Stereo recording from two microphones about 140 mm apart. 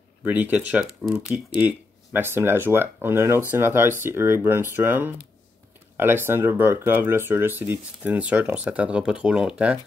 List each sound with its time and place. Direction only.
0.2 s speech: 10° right (ahead or behind)